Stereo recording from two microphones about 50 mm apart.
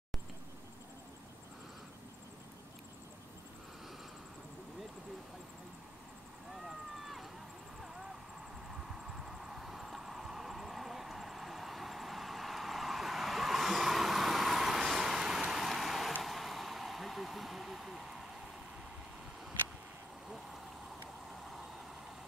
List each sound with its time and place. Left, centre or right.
6.5 s vehicle: centre